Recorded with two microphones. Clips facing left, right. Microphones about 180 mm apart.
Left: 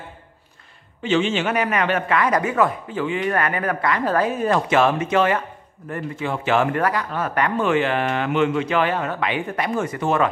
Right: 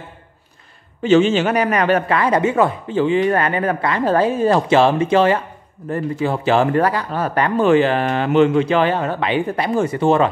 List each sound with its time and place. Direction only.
1.0 s speech: 40° right (ahead or behind)